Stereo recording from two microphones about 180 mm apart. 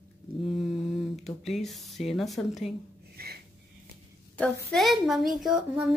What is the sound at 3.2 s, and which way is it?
Wheeze, 60° right (ahead or behind).